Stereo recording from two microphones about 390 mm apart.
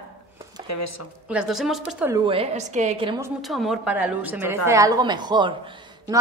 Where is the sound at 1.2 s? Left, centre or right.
Centre.